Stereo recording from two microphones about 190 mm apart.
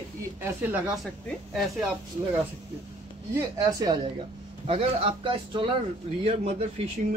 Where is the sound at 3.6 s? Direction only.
20° right (ahead or behind).